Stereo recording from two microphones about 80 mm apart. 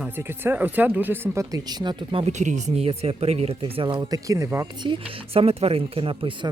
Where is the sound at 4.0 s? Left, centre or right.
Right.